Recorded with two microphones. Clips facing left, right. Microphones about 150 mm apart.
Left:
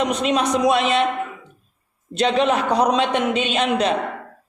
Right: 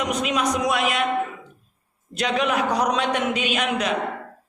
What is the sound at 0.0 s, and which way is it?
A man's voice, 25° left (ahead or behind).